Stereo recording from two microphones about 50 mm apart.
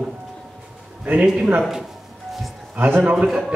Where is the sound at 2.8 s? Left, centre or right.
Right.